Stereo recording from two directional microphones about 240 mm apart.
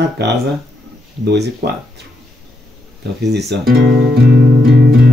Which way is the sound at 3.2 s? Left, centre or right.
Right.